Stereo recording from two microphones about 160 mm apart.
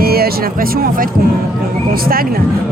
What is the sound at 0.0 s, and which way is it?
Music, 70° right (ahead or behind).